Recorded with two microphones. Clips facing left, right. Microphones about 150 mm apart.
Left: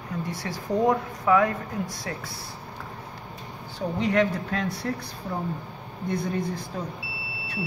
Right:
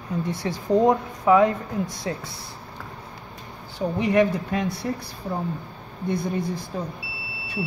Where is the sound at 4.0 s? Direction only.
15° right (ahead or behind).